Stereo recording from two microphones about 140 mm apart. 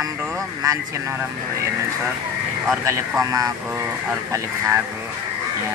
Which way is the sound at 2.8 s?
20° right (ahead or behind).